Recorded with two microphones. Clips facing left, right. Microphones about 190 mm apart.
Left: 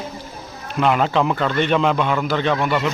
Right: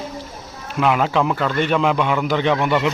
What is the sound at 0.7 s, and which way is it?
A man's voice, 5° right (ahead or behind).